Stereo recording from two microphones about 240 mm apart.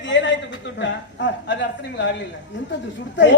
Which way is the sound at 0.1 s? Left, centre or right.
Left.